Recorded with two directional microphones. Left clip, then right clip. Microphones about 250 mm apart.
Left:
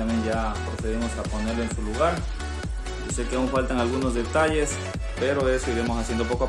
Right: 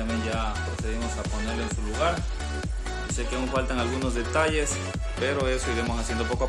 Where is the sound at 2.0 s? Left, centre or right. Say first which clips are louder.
Left 3 dB; centre.